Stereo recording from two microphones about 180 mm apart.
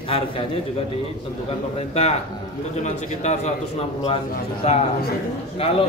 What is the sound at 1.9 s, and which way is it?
A man's voice, 35° left (ahead or behind).